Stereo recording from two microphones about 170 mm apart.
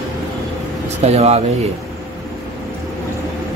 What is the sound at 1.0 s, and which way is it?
Speech, 40° right (ahead or behind).